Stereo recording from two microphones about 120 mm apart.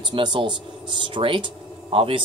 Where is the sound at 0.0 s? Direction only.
40° right (ahead or behind).